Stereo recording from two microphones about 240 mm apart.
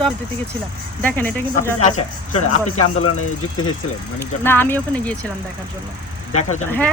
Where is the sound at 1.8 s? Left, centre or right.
Left.